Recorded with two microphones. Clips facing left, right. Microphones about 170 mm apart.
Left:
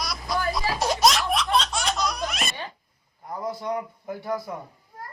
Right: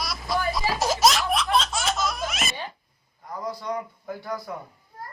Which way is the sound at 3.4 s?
25° left (ahead or behind).